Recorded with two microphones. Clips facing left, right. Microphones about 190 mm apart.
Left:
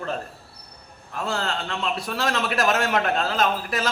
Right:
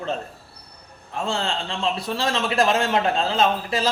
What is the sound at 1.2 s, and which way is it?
A man's voice, 25° right (ahead or behind).